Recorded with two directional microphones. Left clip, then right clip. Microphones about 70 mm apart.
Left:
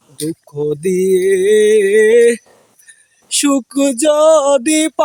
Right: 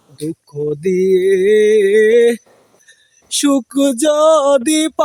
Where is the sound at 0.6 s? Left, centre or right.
Centre.